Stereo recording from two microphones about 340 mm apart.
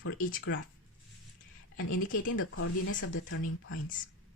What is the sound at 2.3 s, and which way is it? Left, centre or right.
Speech, left.